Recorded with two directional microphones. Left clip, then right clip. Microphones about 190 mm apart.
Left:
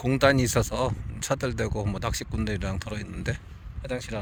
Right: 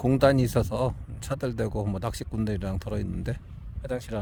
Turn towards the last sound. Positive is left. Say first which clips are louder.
# even
turn(degrees=-30)  # may be behind; listen again after turning